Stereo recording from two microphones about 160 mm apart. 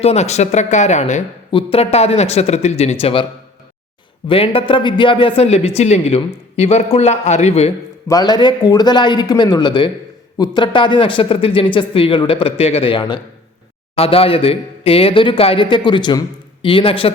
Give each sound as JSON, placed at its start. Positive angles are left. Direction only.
{"t": 0.0, "sound": "a woman's voice", "side_deg": 45}
{"t": 1.5, "sound": "speech", "side_deg": 35}
{"t": 4.3, "sound": "a woman's voice", "side_deg": 35}
{"t": 8.0, "sound": "a man's voice", "side_deg": 25}